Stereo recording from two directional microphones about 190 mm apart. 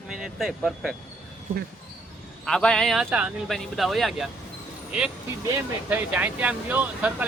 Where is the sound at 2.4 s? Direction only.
5° left (ahead or behind).